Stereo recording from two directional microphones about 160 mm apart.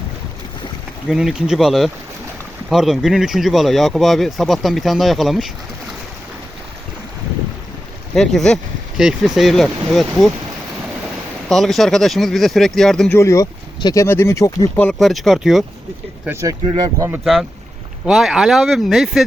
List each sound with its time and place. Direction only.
1.0 s speech: 5° right (ahead or behind)
8.1 s speech: centre (ahead or behind)
11.4 s speech: centre (ahead or behind)
13.1 s speech: 20° left (ahead or behind)
14.8 s speech: centre (ahead or behind)
16.2 s speech: 15° right (ahead or behind)
18.0 s speech: centre (ahead or behind)